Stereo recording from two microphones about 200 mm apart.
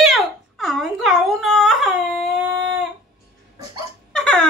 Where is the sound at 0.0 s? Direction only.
Centre (ahead or behind).